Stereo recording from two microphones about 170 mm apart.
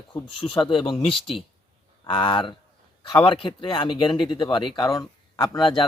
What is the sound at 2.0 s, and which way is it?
Speech, 30° left (ahead or behind).